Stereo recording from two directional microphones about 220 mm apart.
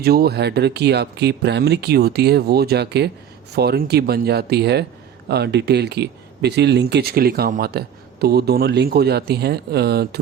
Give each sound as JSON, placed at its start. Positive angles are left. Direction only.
{"t": 0.0, "sound": "speech", "side_deg": -45}